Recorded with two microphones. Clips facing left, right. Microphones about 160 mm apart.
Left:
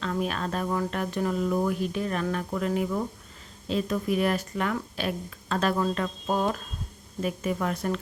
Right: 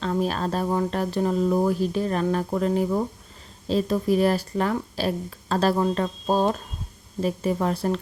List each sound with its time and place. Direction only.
0.0 s speech: 35° right (ahead or behind)